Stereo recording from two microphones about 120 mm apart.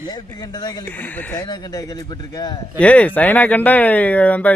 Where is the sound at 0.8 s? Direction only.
15° left (ahead or behind).